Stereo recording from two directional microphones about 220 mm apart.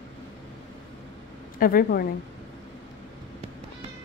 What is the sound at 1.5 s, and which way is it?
Speech, 40° left (ahead or behind).